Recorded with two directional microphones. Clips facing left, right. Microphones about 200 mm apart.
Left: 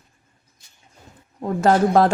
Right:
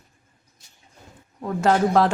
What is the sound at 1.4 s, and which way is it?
Speech, 40° left (ahead or behind).